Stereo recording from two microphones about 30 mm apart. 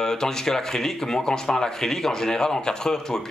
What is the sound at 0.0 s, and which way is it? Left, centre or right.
Speech, centre.